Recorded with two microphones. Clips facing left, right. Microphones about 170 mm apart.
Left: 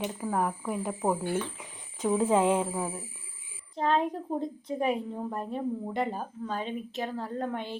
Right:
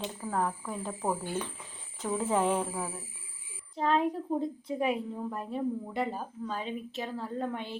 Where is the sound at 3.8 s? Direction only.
5° right (ahead or behind).